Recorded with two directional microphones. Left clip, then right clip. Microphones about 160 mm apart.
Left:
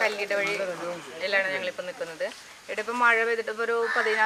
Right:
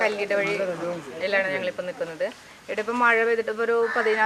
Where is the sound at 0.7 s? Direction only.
25° right (ahead or behind).